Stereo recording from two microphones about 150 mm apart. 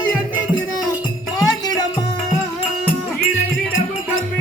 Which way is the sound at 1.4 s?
25° left (ahead or behind).